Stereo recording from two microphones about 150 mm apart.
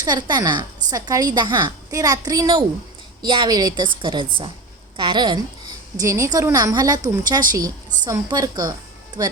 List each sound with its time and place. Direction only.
0.0 s a woman's voice: 30° right (ahead or behind)